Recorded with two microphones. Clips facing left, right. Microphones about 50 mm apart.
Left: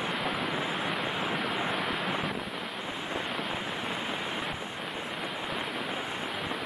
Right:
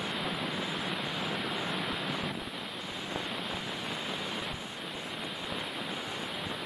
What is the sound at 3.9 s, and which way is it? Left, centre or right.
Waves, left.